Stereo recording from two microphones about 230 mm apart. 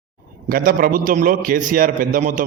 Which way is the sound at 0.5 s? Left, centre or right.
Right.